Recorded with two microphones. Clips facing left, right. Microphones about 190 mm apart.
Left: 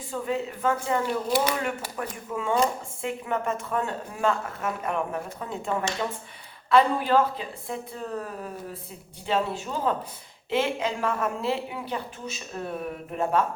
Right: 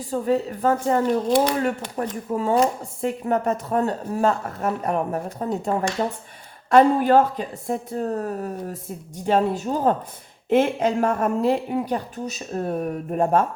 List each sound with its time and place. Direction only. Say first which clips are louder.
0.0 s speech: right 7 dB; 40° right (ahead or behind)